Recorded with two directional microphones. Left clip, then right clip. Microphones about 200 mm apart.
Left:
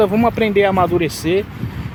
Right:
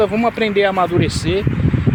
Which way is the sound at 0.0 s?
15° left (ahead or behind).